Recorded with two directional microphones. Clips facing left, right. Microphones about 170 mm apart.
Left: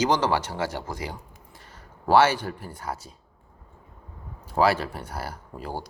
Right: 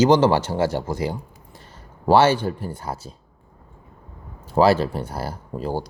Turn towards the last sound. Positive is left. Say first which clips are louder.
# right 8 dB
turn(degrees=-30)  # may be behind; listen again after turning